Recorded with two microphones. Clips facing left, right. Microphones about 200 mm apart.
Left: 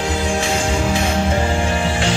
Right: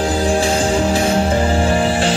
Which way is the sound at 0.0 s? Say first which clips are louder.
Right 4 dB; 35° right (ahead or behind).